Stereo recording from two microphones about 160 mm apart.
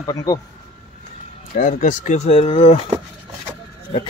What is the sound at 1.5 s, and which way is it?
Speech, 50° left (ahead or behind).